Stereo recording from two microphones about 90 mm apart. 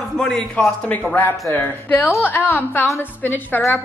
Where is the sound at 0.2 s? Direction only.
5° left (ahead or behind).